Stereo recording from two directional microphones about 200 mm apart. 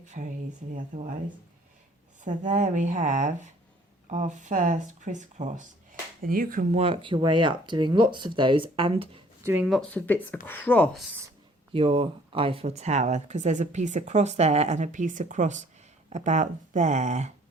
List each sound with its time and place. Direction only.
0.0 s speech: 35° right (ahead or behind)
2.2 s speech: 40° right (ahead or behind)
9.4 s speech: 10° right (ahead or behind)
9.6 s speech: 5° left (ahead or behind)
11.7 s speech: 30° right (ahead or behind)